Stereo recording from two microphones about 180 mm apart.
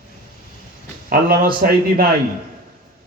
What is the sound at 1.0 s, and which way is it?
A man's voice, 55° right (ahead or behind).